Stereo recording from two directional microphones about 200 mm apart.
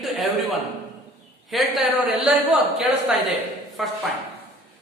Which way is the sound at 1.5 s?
Centre (ahead or behind).